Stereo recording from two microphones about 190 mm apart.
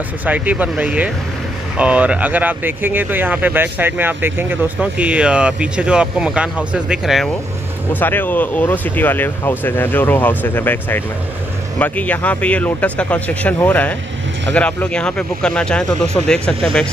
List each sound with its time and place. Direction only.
0.2 s speech: 10° right (ahead or behind)
7.9 s speech: 10° left (ahead or behind)